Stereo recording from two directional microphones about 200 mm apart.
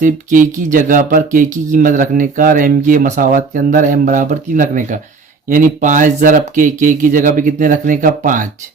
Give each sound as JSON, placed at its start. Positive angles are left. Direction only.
{"t": 0.0, "sound": "speech", "side_deg": -40}